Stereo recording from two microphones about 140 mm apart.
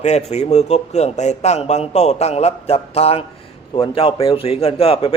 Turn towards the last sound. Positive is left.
turn(degrees=45)  # may be behind; listen again after turning